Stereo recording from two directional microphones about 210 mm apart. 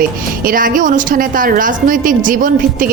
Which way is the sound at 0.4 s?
40° right (ahead or behind).